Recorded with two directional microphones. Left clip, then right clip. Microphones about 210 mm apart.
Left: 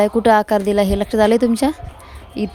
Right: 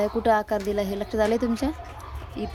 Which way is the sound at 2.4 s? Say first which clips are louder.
Left 8 dB; 50° left (ahead or behind).